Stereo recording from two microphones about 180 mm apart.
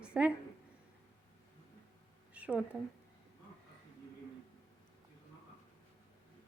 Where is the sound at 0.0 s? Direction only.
5° right (ahead or behind).